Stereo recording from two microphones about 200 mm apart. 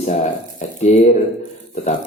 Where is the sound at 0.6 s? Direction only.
35° left (ahead or behind).